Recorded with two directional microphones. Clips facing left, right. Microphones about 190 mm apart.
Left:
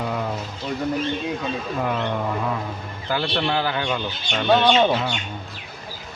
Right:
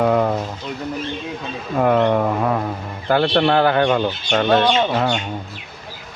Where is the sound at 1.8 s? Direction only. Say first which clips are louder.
Right 11 dB; 55° right (ahead or behind).